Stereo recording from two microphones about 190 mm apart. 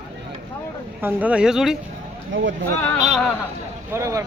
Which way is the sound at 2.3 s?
80° right.